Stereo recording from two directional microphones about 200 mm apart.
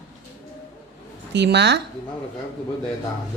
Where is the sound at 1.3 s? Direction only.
60° right (ahead or behind).